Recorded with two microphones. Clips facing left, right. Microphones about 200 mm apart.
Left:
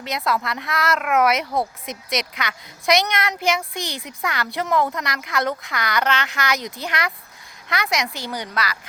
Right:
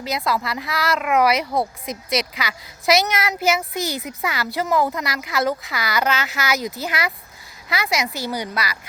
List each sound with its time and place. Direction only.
0.0 s speech: centre (ahead or behind)